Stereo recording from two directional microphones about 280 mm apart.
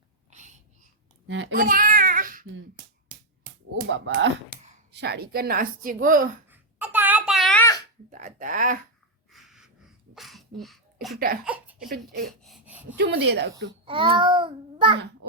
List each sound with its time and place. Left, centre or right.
0.3 s a sound: right
1.3 s a child's voice: right
3.8 s speech: right
6.5 s a sound: centre
8.1 s speech: right
9.3 s sneeze: centre
11.4 s a sound: centre
13.0 s speech: right
13.8 s a child's voice: centre